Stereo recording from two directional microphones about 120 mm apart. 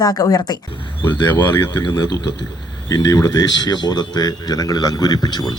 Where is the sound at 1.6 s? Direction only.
30° left (ahead or behind).